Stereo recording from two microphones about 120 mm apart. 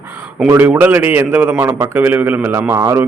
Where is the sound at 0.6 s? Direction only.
15° right (ahead or behind).